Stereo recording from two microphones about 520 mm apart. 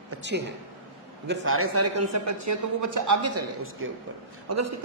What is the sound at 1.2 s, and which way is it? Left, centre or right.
A man's voice, right.